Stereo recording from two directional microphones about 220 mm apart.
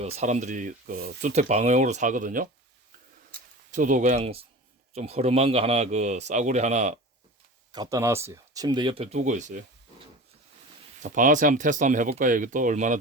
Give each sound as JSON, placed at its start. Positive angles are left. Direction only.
{"t": 0.0, "sound": "speech", "side_deg": -30}
{"t": 3.7, "sound": "speech", "side_deg": -35}
{"t": 7.7, "sound": "speech", "side_deg": -15}
{"t": 11.0, "sound": "speech", "side_deg": -35}